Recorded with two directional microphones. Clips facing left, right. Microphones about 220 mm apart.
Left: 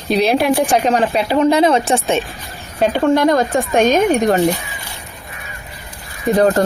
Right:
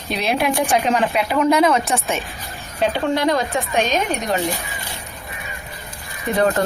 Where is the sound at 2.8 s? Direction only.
45° left (ahead or behind).